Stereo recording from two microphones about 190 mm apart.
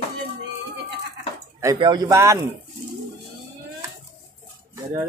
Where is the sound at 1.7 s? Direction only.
25° right (ahead or behind).